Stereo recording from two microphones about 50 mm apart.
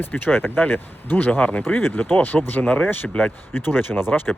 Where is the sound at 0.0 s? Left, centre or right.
Left.